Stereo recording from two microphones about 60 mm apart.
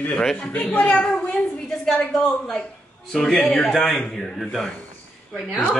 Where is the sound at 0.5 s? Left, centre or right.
Centre.